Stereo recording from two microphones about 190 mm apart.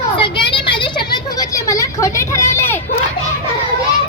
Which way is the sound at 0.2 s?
25° left (ahead or behind).